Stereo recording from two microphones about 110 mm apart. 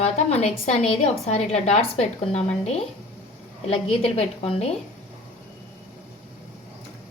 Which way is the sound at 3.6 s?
65° left (ahead or behind).